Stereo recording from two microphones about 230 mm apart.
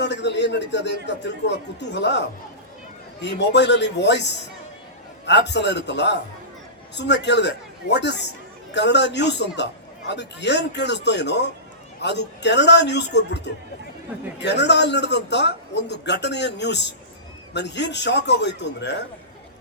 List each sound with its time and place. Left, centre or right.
0.0 s a man's voice: left